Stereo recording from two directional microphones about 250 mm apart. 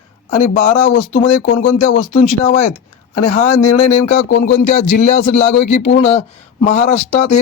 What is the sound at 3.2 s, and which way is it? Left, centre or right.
Speech, left.